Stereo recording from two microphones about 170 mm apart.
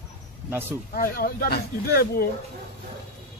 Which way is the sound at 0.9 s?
60° left (ahead or behind).